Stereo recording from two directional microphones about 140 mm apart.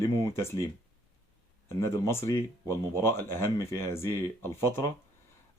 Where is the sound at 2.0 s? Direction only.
20° left (ahead or behind).